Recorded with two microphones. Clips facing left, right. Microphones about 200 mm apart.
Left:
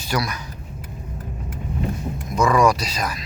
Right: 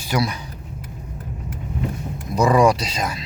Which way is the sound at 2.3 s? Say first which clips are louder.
Right 2 dB; 30° right (ahead or behind).